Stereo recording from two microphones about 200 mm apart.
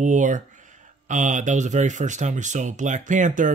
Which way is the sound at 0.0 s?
40° right (ahead or behind).